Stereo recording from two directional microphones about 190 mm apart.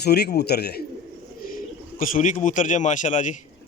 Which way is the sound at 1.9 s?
45° left (ahead or behind).